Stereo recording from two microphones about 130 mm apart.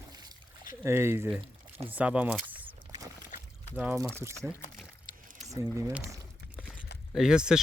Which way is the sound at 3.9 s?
20° right (ahead or behind).